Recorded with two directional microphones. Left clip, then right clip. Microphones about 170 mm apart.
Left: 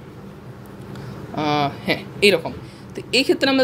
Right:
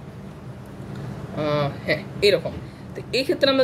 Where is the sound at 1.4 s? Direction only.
45° left (ahead or behind).